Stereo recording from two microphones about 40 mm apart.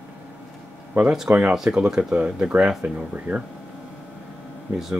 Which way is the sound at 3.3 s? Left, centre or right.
Right.